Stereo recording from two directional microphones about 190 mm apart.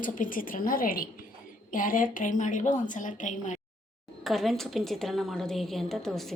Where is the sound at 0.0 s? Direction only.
45° left (ahead or behind).